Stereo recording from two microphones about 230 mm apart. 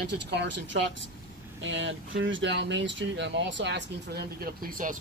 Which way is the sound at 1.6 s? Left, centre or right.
Right.